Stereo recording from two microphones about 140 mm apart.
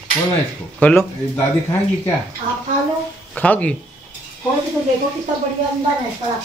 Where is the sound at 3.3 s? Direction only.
10° left (ahead or behind).